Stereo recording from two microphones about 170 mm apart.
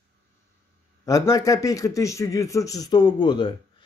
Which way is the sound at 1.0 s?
20° left (ahead or behind).